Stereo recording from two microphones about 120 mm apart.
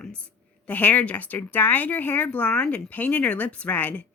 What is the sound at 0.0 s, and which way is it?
Speech, 10° left (ahead or behind).